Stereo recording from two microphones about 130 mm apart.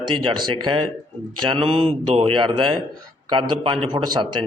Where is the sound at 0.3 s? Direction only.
40° right (ahead or behind).